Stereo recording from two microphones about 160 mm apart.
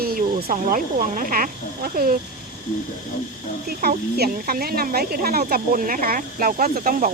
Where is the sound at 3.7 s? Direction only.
70° right (ahead or behind).